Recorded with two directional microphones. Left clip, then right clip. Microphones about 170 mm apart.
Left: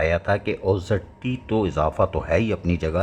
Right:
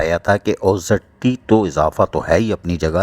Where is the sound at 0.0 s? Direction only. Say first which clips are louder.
Right 5 dB; 40° right (ahead or behind).